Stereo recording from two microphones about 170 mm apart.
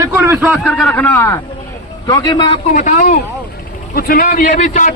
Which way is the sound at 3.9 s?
60° left (ahead or behind).